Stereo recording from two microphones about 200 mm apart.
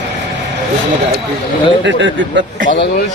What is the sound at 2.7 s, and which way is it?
Speech, 60° left (ahead or behind).